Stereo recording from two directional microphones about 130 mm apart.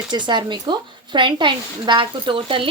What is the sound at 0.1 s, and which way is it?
Speech, 35° right (ahead or behind).